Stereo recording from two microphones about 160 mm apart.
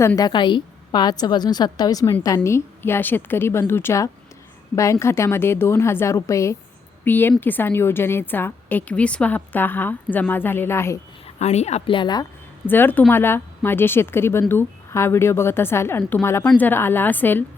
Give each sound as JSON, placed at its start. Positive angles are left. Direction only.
{"t": 0.0, "sound": "a woman's voice", "side_deg": 20}
{"t": 11.3, "sound": "speech", "side_deg": 45}
{"t": 12.6, "sound": "a woman's voice", "side_deg": 10}